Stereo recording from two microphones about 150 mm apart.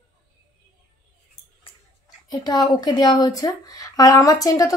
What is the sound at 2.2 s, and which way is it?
A woman's voice, 25° left (ahead or behind).